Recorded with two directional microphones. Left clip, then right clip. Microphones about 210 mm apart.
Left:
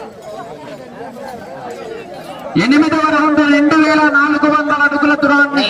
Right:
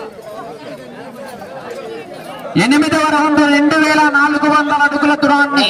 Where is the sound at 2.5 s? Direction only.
55° right (ahead or behind).